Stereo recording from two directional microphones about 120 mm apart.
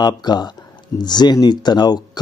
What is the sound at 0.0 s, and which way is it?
Speech, 35° left (ahead or behind).